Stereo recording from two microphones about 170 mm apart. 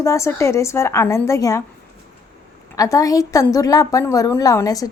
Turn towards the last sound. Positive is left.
turn(degrees=20)  # may be behind; listen again after turning